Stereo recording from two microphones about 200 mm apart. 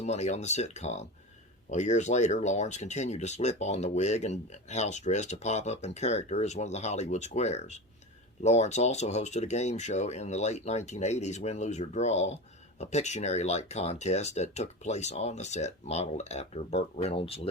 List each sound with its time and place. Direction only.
0.0 s speech: 35° left (ahead or behind)